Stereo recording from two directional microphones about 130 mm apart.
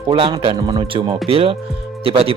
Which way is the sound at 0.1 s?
35° right (ahead or behind).